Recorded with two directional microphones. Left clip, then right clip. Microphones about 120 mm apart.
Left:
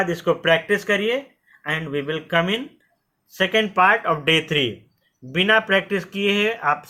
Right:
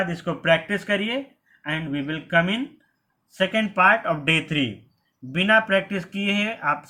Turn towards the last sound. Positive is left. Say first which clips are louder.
# left 4 dB
turn(degrees=25)  # may be behind; listen again after turning